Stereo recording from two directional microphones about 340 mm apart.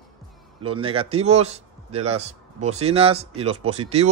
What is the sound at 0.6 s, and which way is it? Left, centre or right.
A man's voice, centre.